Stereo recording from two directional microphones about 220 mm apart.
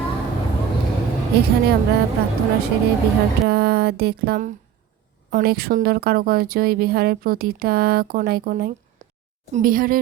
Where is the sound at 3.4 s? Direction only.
45° right (ahead or behind).